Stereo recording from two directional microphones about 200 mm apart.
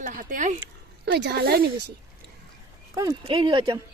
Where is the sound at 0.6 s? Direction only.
55° right (ahead or behind).